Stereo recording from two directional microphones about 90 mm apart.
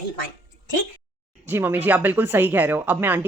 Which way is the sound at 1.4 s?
20° right (ahead or behind).